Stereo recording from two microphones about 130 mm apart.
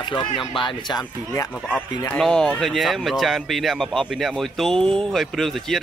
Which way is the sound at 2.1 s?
5° left (ahead or behind).